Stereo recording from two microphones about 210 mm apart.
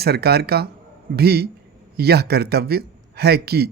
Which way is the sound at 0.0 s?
50° right (ahead or behind).